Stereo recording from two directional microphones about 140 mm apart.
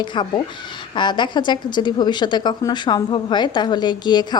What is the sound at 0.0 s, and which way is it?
A woman's voice, 35° left (ahead or behind).